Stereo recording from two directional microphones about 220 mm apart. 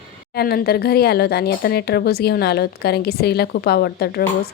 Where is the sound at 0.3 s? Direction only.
45° left (ahead or behind).